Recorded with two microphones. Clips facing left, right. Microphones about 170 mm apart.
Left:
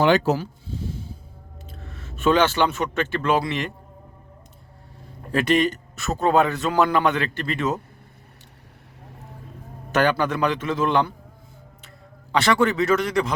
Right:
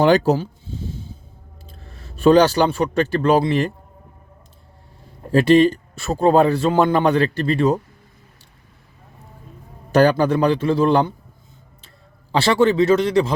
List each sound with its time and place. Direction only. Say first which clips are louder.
0.0 s speech: right 4 dB; 35° right (ahead or behind)
1.6 s speech: left 2 dB; 35° right (ahead or behind)
5.3 s speech: right 7 dB; 30° right (ahead or behind)
9.9 s speech: right 6 dB; 35° right (ahead or behind)
12.3 s a man's voice: right 4 dB; 30° right (ahead or behind)